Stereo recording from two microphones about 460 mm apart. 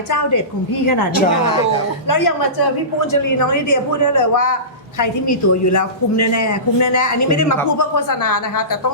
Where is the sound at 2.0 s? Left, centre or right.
Left.